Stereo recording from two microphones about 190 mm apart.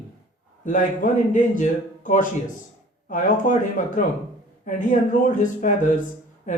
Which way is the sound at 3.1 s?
40° left (ahead or behind).